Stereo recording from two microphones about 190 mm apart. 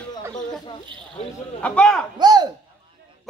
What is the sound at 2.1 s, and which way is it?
Speech, 20° right (ahead or behind).